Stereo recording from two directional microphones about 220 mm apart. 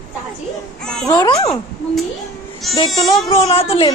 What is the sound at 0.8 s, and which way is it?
Babbling, 5° left (ahead or behind).